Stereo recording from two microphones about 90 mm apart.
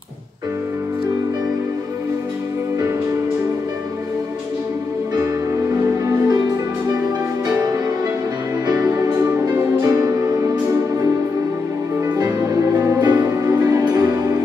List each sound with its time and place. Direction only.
5.8 s music: 40° right (ahead or behind)
8.9 s music: 40° right (ahead or behind)
12.2 s music: 40° right (ahead or behind)
13.0 s music: 50° right (ahead or behind)
13.3 s music: 35° right (ahead or behind)